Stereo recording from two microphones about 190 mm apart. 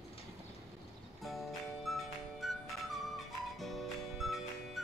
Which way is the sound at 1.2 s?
Centre (ahead or behind).